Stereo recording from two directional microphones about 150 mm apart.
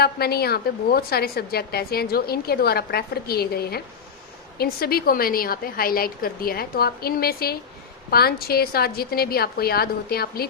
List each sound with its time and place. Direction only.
0.0 s a woman's voice: 90° left